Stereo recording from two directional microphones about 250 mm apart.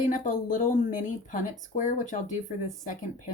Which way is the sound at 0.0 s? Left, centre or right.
Left.